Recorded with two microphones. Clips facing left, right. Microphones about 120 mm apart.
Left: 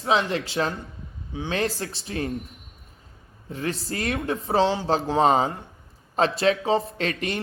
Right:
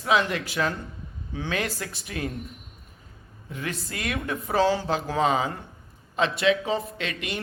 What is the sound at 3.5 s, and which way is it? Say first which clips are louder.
Speech: left 4 dB; 35° left (ahead or behind).